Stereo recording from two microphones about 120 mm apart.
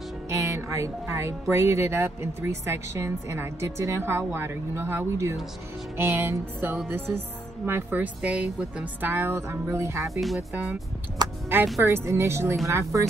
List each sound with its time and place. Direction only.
0.3 s music: 25° right (ahead or behind)
1.5 s speech: 20° right (ahead or behind)
10.5 s speech: 15° right (ahead or behind)
11.2 s speech: 35° right (ahead or behind)
11.8 s speech: 25° right (ahead or behind)